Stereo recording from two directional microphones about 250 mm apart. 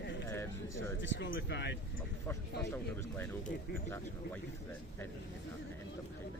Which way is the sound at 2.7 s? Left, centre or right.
Centre.